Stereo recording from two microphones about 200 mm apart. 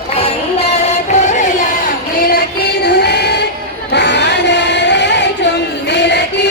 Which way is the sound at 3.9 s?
60° left (ahead or behind).